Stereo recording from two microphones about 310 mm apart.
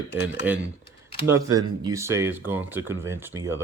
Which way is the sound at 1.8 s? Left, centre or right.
Centre.